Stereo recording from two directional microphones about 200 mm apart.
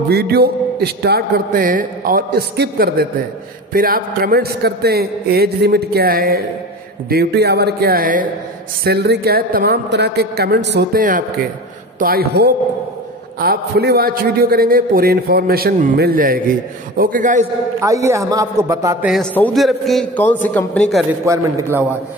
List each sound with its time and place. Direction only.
0.1 s a man's voice: 50° right (ahead or behind)
8.8 s a man's voice: 55° right (ahead or behind); by 17.5 s 40° right (ahead or behind)
17.7 s a man's voice: 15° right (ahead or behind)
19.3 s a man's voice: 5° left (ahead or behind)
21.3 s a man's voice: 15° right (ahead or behind)